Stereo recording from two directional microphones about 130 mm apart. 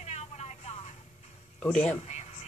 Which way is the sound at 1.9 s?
60° left (ahead or behind).